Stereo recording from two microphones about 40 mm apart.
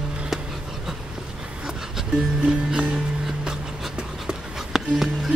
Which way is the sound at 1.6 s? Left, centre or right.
Centre.